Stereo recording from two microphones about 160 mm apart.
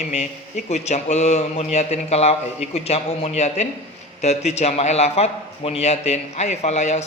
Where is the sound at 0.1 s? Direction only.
45° left (ahead or behind).